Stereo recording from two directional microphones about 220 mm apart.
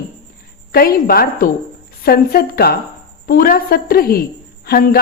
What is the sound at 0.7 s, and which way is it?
A woman's voice, 40° left (ahead or behind).